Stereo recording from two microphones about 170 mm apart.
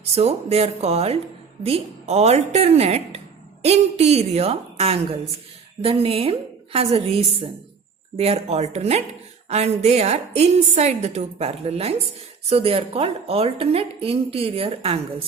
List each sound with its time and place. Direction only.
0.0 s a woman's voice: 40° right (ahead or behind)